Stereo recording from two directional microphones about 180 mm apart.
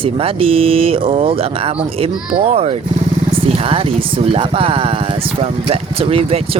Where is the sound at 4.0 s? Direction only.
30° right (ahead or behind).